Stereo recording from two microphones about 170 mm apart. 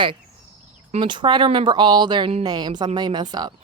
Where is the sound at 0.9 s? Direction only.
30° right (ahead or behind).